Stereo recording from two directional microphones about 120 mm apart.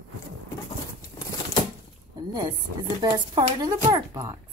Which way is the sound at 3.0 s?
40° right (ahead or behind).